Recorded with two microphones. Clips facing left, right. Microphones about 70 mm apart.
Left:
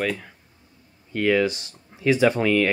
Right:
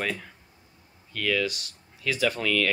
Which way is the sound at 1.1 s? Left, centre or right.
Left.